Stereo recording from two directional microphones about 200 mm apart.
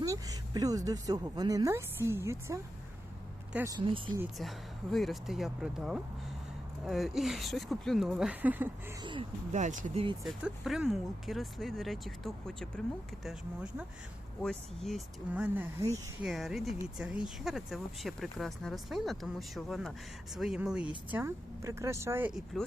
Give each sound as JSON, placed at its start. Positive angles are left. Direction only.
{"t": 0.0, "sound": "a woman's voice", "side_deg": -15}
{"t": 4.2, "sound": "speech", "side_deg": 0}
{"t": 9.5, "sound": "speech", "side_deg": -35}
{"t": 10.2, "sound": "a woman's voice", "side_deg": 0}
{"t": 22.5, "sound": "speech", "side_deg": 0}